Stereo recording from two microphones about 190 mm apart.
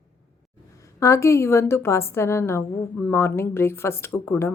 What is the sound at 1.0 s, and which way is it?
A woman's voice, 15° left (ahead or behind).